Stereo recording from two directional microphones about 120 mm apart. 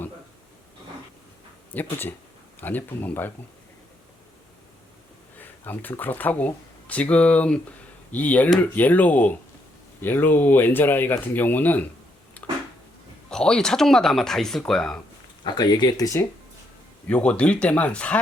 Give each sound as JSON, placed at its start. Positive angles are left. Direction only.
{"t": 1.7, "sound": "speech", "side_deg": 15}
{"t": 5.4, "sound": "speech", "side_deg": 15}
{"t": 12.4, "sound": "a sound", "side_deg": 15}
{"t": 13.3, "sound": "speech", "side_deg": 5}
{"t": 15.4, "sound": "speech", "side_deg": 35}
{"t": 17.1, "sound": "speech", "side_deg": 10}